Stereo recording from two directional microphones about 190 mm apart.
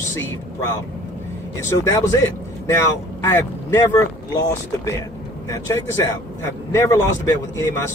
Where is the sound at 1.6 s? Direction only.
15° left (ahead or behind).